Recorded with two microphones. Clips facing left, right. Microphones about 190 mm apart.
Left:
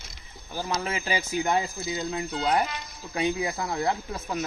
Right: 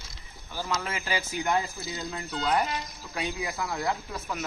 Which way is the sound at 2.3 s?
30° left (ahead or behind).